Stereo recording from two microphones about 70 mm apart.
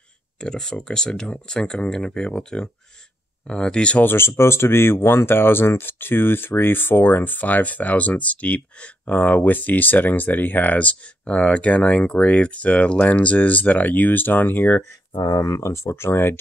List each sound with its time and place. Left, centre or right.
0.4 s speech: centre
4.0 s speech: left
15.1 s speech: left
15.4 s speech: left